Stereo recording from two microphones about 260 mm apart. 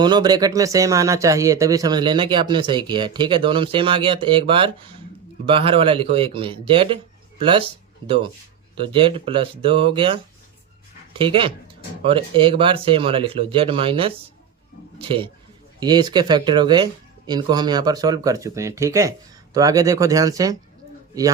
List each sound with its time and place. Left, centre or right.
0.0 s a man's voice: centre
15.8 s speech: centre